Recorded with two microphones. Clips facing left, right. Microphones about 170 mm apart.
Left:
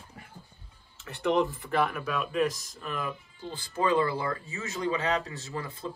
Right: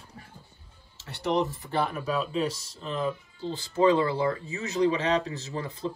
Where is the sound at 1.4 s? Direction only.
35° right (ahead or behind).